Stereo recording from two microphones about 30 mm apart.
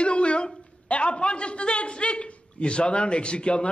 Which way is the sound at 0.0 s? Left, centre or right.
Left.